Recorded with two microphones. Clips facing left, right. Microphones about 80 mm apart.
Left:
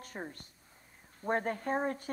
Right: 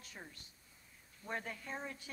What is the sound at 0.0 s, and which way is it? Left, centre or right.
A woman's voice, left.